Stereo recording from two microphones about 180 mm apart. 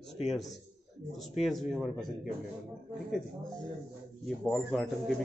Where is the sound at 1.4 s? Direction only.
Centre (ahead or behind).